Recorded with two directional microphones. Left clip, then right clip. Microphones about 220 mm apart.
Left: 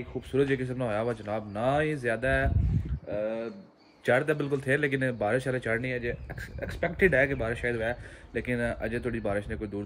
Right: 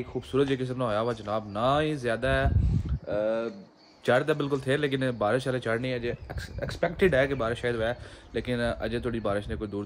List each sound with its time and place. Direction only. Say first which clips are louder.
0.3 s a man's voice: even; 15° right (ahead or behind)